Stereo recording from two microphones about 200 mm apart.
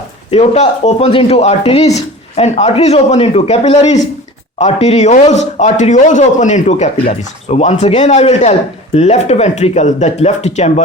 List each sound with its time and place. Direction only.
0.3 s speech: 30° left (ahead or behind)